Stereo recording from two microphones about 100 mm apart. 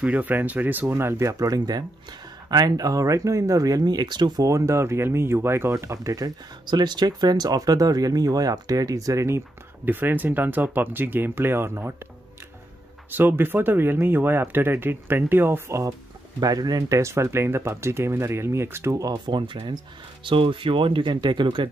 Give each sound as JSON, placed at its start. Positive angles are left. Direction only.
{"t": 0.0, "sound": "speech", "side_deg": -15}
{"t": 9.8, "sound": "speech", "side_deg": -20}
{"t": 13.1, "sound": "speech", "side_deg": -20}
{"t": 16.3, "sound": "speech", "side_deg": -40}
{"t": 19.1, "sound": "speech", "side_deg": -50}